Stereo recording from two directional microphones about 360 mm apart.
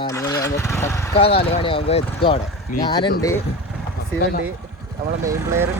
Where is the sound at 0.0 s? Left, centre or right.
Centre.